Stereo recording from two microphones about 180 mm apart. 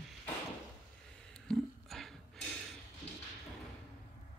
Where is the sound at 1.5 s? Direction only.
5° left (ahead or behind).